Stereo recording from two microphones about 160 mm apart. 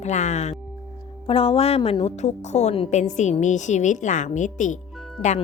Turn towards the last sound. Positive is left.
turn(degrees=45)  # may be behind; listen again after turning